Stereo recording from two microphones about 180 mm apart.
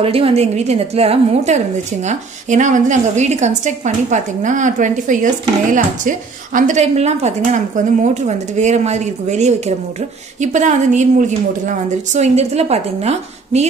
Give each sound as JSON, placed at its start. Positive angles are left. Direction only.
{"t": 0.0, "sound": "a woman's voice", "side_deg": -30}